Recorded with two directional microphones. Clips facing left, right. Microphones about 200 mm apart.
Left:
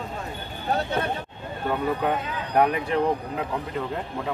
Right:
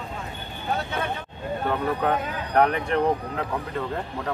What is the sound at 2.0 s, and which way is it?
Speech, 10° left (ahead or behind).